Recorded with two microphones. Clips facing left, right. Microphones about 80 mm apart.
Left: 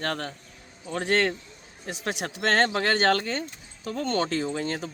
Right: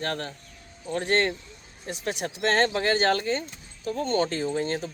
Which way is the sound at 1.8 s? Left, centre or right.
Left.